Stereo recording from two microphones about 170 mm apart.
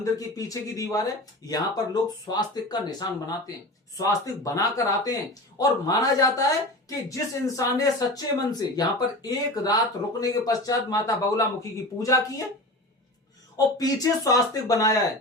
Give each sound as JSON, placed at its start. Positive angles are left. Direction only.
{"t": 0.0, "sound": "speech", "side_deg": 20}
{"t": 13.7, "sound": "speech", "side_deg": 20}